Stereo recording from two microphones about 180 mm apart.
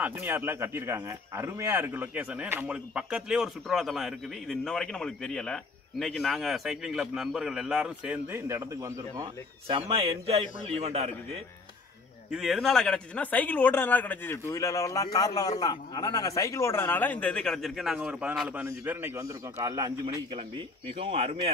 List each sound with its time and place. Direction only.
0.0 s speech: 10° right (ahead or behind)
9.7 s a man's voice: 30° right (ahead or behind)
12.3 s a man's voice: centre (ahead or behind); by 19.9 s 20° right (ahead or behind)
20.3 s a man's voice: 30° right (ahead or behind)